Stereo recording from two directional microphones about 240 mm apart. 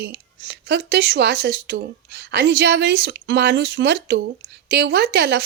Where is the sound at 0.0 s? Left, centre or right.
Right.